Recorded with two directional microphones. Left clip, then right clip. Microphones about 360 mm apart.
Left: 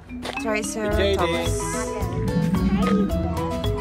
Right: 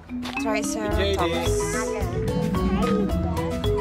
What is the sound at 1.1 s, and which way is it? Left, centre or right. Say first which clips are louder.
Speech: even; centre.